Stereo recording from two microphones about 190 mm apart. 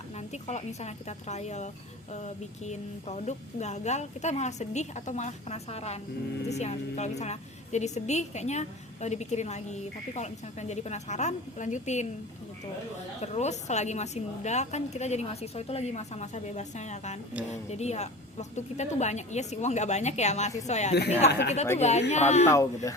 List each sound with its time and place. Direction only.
0.4 s a woman's voice: 35° left (ahead or behind)
13.2 s a woman's voice: 35° left (ahead or behind)
21.2 s speech: 60° left (ahead or behind)
21.8 s a woman's voice: 35° left (ahead or behind)
22.4 s speech: 15° left (ahead or behind)